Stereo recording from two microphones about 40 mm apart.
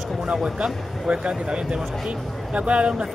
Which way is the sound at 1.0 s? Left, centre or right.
Right.